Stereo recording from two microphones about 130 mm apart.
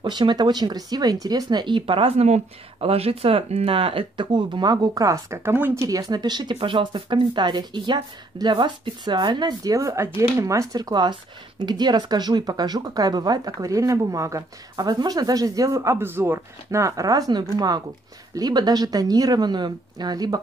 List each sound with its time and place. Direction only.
0.0 s speech: 35° right (ahead or behind)